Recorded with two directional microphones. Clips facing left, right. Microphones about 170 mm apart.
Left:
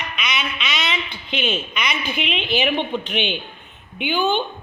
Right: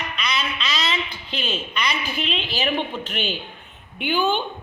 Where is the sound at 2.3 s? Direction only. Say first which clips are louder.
Left 5 dB; 35° right (ahead or behind).